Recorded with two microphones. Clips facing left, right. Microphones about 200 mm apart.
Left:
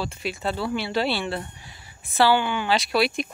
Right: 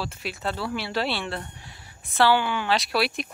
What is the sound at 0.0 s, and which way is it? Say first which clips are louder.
Speech: left 3 dB; centre (ahead or behind).